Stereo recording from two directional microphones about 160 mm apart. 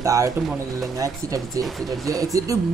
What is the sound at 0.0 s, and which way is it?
Speech, 20° right (ahead or behind).